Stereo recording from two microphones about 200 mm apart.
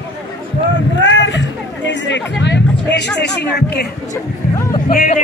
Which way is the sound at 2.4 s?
60° left (ahead or behind).